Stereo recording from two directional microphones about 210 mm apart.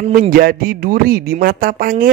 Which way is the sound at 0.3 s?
40° right (ahead or behind).